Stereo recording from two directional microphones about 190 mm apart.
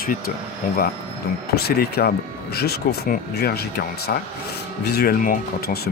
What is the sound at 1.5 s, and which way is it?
Speech, 55° left (ahead or behind).